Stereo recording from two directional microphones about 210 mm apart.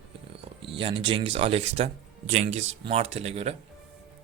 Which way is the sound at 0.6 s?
25° right (ahead or behind).